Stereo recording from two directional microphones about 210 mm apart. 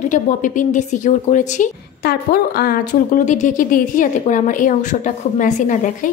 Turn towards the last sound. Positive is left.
turn(degrees=35)  # may be behind; listen again after turning